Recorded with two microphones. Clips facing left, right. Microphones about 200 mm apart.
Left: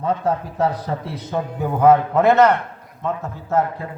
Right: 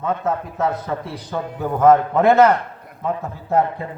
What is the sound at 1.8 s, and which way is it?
Speech, 5° left (ahead or behind).